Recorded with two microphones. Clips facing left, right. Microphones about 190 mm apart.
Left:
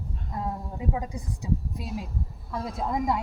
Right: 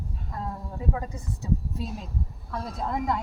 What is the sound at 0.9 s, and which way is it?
A woman's voice, 15° left (ahead or behind).